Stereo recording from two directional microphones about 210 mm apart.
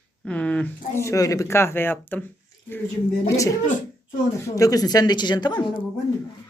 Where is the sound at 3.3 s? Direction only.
15° left (ahead or behind).